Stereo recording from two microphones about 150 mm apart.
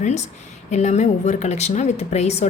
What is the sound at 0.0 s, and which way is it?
A woman's voice, 50° left (ahead or behind).